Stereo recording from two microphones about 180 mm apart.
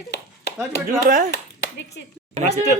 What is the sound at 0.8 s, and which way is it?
Speech, 50° right (ahead or behind).